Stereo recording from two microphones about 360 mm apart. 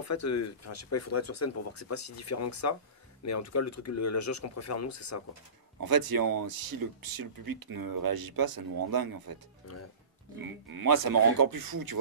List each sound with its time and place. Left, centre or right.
0.0 s speech: left
5.8 s speech: right
10.4 s speech: right